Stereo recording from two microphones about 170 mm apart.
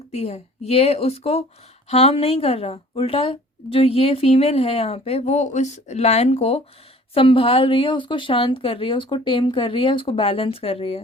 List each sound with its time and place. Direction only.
0.1 s speech: 40° left (ahead or behind)